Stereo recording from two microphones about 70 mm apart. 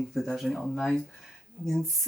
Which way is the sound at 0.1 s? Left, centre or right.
Centre.